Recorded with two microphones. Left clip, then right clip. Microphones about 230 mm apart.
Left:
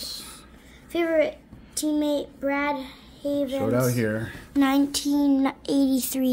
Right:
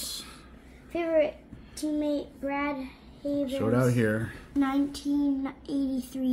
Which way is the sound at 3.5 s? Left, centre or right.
Centre.